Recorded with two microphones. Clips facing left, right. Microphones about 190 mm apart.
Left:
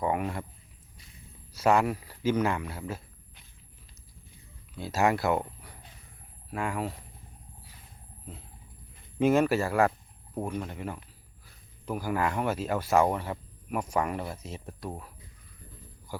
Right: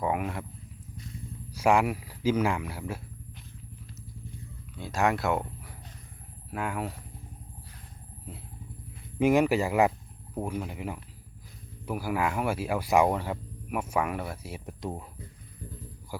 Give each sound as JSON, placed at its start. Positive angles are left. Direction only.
{"t": 0.0, "sound": "speech", "side_deg": -5}
{"t": 1.5, "sound": "speech", "side_deg": -10}
{"t": 4.8, "sound": "speech", "side_deg": 5}
{"t": 9.1, "sound": "speech", "side_deg": -15}